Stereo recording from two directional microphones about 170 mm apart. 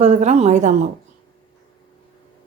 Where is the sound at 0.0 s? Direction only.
40° right (ahead or behind).